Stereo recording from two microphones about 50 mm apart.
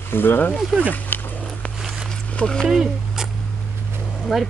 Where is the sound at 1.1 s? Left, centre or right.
Left.